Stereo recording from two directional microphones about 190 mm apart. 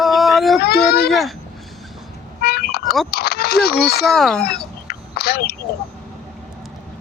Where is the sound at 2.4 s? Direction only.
55° left (ahead or behind).